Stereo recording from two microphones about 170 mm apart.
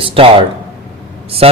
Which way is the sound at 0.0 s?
30° right (ahead or behind).